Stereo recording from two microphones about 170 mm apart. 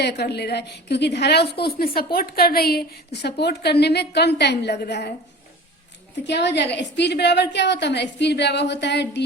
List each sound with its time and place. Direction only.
0.0 s a woman's voice: 75° left (ahead or behind)
6.2 s a woman's voice: 90° left